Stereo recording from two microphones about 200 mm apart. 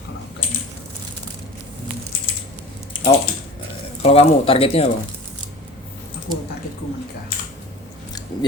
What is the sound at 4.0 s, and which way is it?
Speech, 30° left (ahead or behind).